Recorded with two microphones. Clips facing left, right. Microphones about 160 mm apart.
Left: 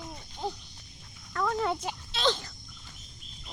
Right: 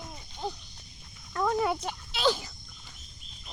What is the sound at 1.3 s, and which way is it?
Speech, 15° right (ahead or behind).